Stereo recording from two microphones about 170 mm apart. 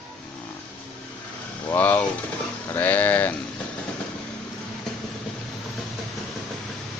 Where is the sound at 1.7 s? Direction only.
10° left (ahead or behind).